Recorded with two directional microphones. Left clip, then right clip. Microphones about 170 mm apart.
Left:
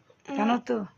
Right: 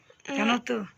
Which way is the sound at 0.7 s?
30° left (ahead or behind).